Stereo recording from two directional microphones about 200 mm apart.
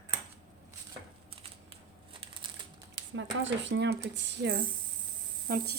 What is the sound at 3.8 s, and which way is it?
Speech, 60° right (ahead or behind).